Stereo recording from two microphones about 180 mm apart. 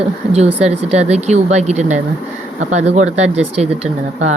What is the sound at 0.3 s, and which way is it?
Speech, 35° right (ahead or behind).